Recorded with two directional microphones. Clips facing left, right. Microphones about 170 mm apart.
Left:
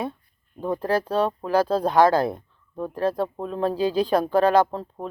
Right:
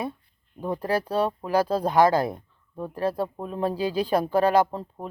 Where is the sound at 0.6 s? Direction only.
10° right (ahead or behind).